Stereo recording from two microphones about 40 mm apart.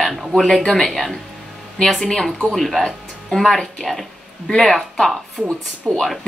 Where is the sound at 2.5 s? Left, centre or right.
Centre.